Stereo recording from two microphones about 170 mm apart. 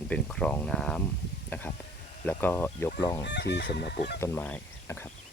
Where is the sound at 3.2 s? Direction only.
85° left; by 4.1 s 65° left (ahead or behind).